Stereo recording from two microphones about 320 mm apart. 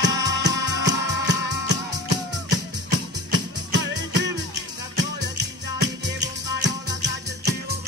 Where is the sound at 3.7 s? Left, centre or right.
Right.